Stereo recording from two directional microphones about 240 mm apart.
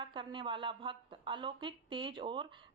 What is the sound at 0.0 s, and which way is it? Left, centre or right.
A woman's voice, centre.